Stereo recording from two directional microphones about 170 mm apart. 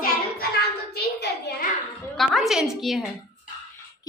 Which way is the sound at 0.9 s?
75° left (ahead or behind).